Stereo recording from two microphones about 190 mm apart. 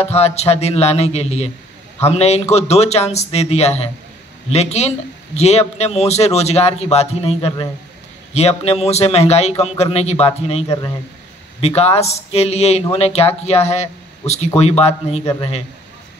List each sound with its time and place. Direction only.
0.0 s a man's voice: 35° left (ahead or behind)
11.6 s a man's voice: 35° left (ahead or behind)